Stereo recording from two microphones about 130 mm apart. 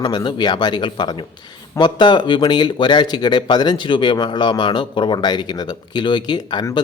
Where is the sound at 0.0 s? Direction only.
35° left (ahead or behind).